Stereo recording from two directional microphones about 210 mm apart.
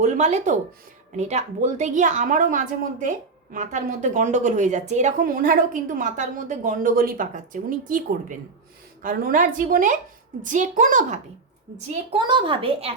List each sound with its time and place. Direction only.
0.0 s a woman's voice: 30° right (ahead or behind)
12.1 s a child's voice: 25° right (ahead or behind)